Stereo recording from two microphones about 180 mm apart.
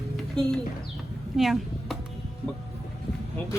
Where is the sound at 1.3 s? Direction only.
Centre (ahead or behind).